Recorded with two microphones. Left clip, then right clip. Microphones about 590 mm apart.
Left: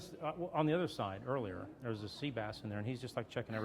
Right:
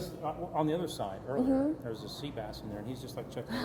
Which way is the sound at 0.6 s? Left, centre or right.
Left.